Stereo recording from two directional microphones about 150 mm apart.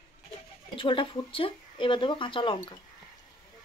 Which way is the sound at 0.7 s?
35° left (ahead or behind).